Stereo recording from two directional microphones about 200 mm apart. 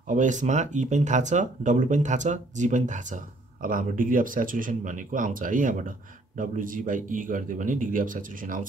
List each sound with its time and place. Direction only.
0.0 s speech: 40° right (ahead or behind)